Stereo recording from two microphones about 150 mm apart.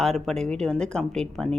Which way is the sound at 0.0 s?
Centre (ahead or behind).